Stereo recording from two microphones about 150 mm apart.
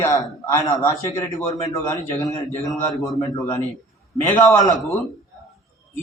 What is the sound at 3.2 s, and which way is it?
A man's voice, 20° left (ahead or behind).